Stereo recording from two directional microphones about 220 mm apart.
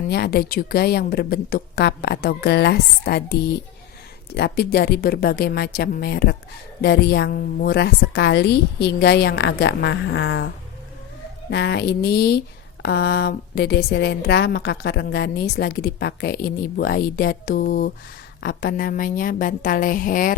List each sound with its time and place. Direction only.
0.1 s a woman's voice: 45° left (ahead or behind)
11.5 s a woman's voice: 50° left (ahead or behind)